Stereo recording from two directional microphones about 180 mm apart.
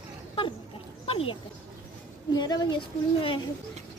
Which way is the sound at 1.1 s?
30° left (ahead or behind).